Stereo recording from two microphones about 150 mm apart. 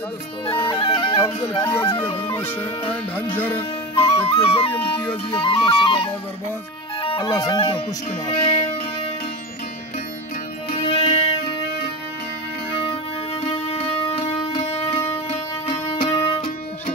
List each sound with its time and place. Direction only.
0.7 s bagpipes: 35° left (ahead or behind)
1.6 s speech: 15° left (ahead or behind)
3.9 s music: 40° left (ahead or behind)
7.0 s music: 40° left (ahead or behind)
7.2 s speech: 25° left (ahead or behind)
7.5 s music: 40° left (ahead or behind)
10.8 s music: 40° left (ahead or behind)
13.5 s music: 40° left (ahead or behind)